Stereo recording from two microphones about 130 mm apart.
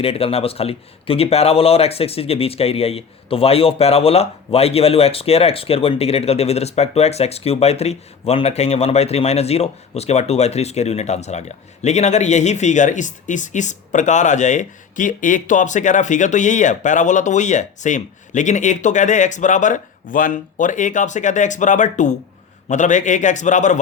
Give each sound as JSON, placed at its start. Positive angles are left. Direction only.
{"t": 0.0, "sound": "a man's voice", "side_deg": 50}